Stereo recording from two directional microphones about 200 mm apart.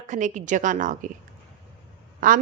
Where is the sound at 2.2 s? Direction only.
40° right (ahead or behind).